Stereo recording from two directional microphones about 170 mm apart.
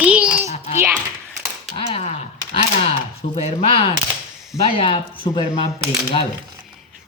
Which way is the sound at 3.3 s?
35° left (ahead or behind).